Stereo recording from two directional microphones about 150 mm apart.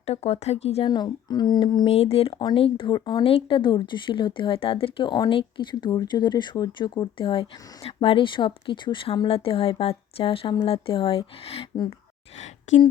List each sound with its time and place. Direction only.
0.0 s speech: 45° left (ahead or behind)
0.9 s speech: 30° left (ahead or behind)
1.9 s speech: 40° left (ahead or behind)
12.7 s speech: 50° left (ahead or behind)